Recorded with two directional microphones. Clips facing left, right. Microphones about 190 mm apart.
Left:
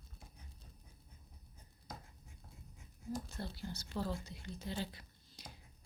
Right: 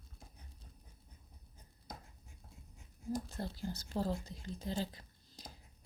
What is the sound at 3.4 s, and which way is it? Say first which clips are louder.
Speech: right 3 dB; 40° right (ahead or behind).